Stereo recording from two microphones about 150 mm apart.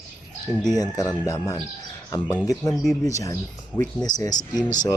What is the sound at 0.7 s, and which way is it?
Speech, 25° left (ahead or behind).